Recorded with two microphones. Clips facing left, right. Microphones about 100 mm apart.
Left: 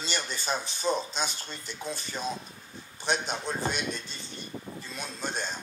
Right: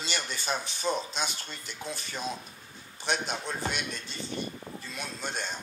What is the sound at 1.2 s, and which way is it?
A man's voice, 35° left (ahead or behind).